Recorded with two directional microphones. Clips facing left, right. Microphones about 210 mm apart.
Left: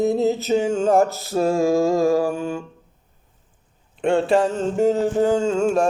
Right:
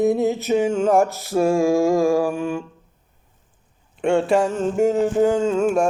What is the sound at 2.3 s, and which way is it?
Music, 40° left (ahead or behind).